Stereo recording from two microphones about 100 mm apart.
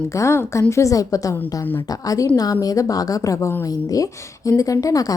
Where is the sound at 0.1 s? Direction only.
30° left (ahead or behind).